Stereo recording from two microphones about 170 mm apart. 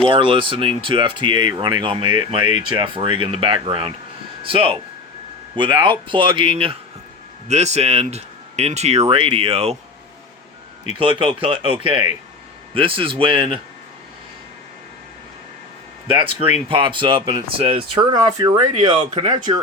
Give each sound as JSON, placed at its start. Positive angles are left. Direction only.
{"t": 0.1, "sound": "speech", "side_deg": -30}
{"t": 10.9, "sound": "speech", "side_deg": -30}
{"t": 16.0, "sound": "speech", "side_deg": -30}